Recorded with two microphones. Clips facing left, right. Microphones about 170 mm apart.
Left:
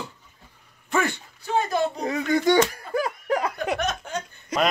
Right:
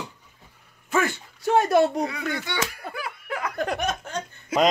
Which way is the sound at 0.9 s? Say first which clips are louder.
Even; centre (ahead or behind).